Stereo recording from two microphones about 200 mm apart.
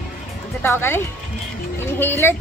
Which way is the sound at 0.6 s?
10° left (ahead or behind).